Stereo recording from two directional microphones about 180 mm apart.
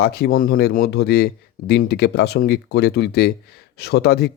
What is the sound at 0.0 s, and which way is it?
Speech, 60° left (ahead or behind).